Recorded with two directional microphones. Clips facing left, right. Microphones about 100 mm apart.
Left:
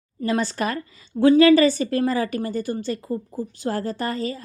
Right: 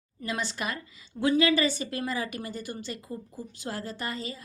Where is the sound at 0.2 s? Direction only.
40° left (ahead or behind).